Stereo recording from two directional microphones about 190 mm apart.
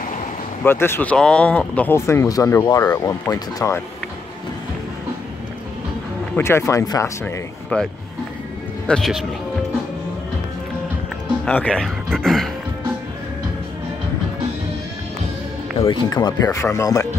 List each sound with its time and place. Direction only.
0.7 s speech: 10° left (ahead or behind)
6.3 s speech: 15° left (ahead or behind)
11.4 s speech: 5° left (ahead or behind)
15.8 s speech: 20° left (ahead or behind)